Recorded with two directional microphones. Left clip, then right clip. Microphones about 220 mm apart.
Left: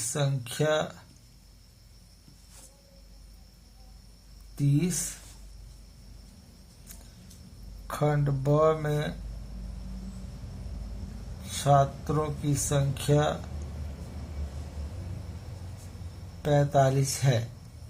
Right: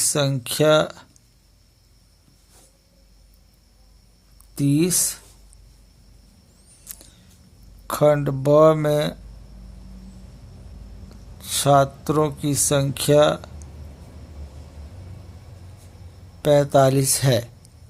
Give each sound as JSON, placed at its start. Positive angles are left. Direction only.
{"t": 0.1, "sound": "speech", "side_deg": -55}
{"t": 4.5, "sound": "speech", "side_deg": -50}
{"t": 7.9, "sound": "speech", "side_deg": -50}
{"t": 11.5, "sound": "speech", "side_deg": -55}
{"t": 16.4, "sound": "speech", "side_deg": -55}